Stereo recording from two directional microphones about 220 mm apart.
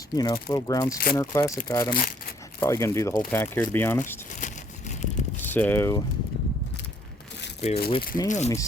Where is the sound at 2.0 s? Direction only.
40° left (ahead or behind).